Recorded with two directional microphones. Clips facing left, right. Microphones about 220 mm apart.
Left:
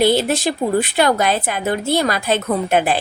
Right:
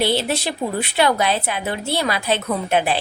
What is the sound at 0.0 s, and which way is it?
A woman's voice, 45° left (ahead or behind).